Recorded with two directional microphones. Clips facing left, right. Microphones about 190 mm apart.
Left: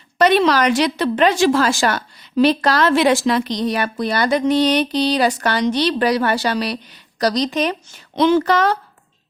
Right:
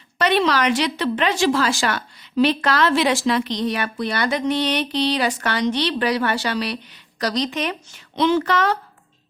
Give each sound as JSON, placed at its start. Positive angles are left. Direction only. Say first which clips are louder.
{"t": 0.2, "sound": "a woman's voice", "louder": "left 4 dB", "side_deg": 40}